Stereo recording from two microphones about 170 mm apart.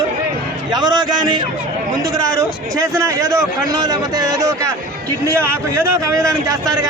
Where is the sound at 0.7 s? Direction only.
25° right (ahead or behind).